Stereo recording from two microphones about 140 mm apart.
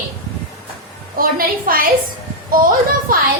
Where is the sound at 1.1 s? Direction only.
90° right.